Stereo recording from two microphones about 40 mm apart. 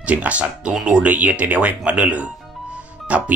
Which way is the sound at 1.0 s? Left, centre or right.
Right.